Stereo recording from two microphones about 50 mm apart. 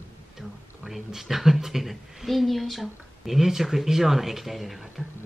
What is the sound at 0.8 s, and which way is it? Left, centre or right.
Speech, centre.